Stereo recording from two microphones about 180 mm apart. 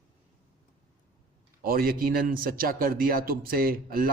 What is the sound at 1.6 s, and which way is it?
Speech, 55° right (ahead or behind).